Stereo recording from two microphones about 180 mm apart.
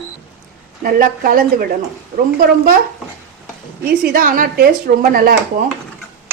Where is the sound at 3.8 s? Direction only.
55° right (ahead or behind).